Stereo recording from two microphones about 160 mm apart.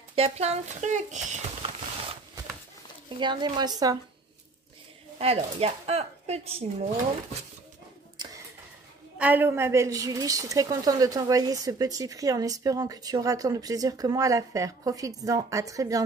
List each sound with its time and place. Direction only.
0.1 s speech: 40° right (ahead or behind)
3.2 s a woman's voice: 30° right (ahead or behind)
5.2 s speech: 40° right (ahead or behind)
9.2 s a woman's voice: 10° right (ahead or behind)